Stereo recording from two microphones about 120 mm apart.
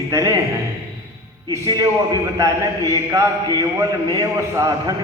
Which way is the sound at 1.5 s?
30° right (ahead or behind).